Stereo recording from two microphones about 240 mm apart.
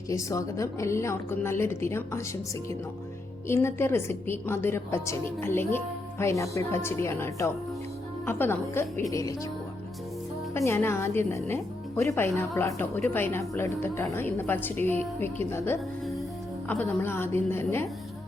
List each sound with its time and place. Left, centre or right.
0.1 s speech: centre
3.4 s speech: centre
10.5 s speech: centre